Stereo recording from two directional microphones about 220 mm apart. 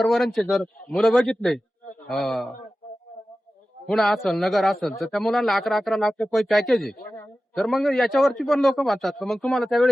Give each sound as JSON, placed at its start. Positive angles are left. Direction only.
{"t": 0.0, "sound": "a man's voice", "side_deg": 0}
{"t": 3.8, "sound": "a man's voice", "side_deg": 0}